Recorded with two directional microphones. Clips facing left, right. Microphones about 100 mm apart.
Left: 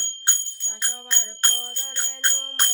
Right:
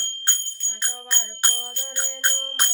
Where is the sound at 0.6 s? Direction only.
Centre (ahead or behind).